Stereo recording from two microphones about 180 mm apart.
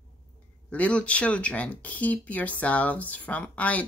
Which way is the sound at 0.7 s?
5° left (ahead or behind).